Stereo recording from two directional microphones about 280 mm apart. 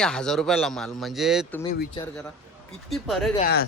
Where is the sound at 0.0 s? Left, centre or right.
Centre.